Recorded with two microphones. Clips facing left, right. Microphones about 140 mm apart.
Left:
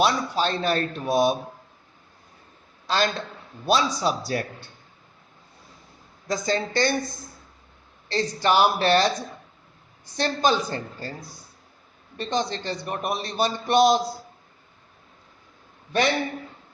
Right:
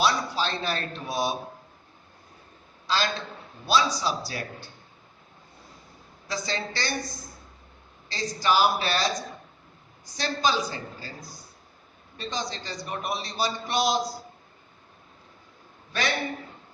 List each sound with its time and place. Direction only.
0.0 s a man's voice: 50° left (ahead or behind)
2.8 s a man's voice: 50° left (ahead or behind)
6.2 s a man's voice: 50° left (ahead or behind)
8.1 s a man's voice: 60° left (ahead or behind)
12.1 s a man's voice: 55° left (ahead or behind)